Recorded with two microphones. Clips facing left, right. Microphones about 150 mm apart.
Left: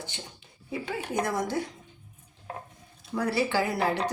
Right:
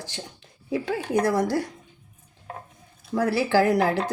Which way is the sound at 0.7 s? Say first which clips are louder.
Right 6 dB; 80° right.